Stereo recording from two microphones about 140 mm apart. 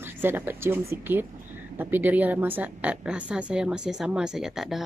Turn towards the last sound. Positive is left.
turn(degrees=0)  # may be behind; listen again after turning